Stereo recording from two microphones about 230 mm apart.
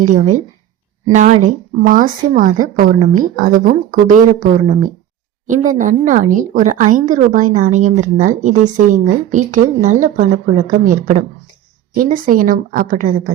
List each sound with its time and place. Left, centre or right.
0.0 s a woman's voice: right